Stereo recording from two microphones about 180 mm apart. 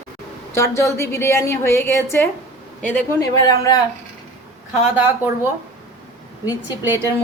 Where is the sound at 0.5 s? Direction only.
15° left (ahead or behind).